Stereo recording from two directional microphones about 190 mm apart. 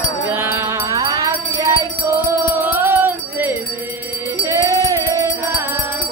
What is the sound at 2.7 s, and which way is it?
Music, 10° right (ahead or behind).